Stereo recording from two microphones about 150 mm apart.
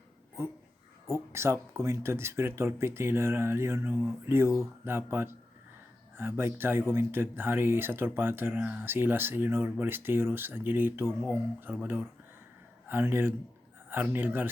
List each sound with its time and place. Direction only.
0.4 s speech: 15° right (ahead or behind)